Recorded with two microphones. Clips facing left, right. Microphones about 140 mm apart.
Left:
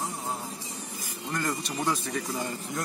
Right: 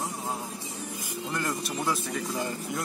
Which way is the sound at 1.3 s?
5° right (ahead or behind).